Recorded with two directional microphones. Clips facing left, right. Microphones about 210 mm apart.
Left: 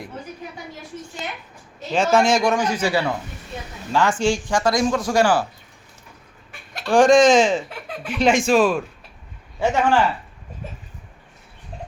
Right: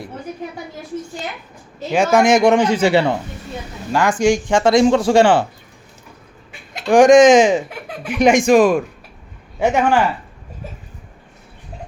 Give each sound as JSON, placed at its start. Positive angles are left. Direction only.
{"t": 1.9, "sound": "speech", "side_deg": -15}
{"t": 3.9, "sound": "speech", "side_deg": -15}
{"t": 6.7, "sound": "speech", "side_deg": -15}